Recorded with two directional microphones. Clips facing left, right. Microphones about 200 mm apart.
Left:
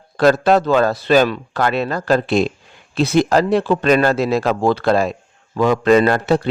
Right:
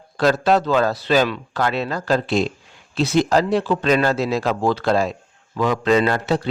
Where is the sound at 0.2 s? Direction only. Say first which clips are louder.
Left 4 dB; 55° left (ahead or behind).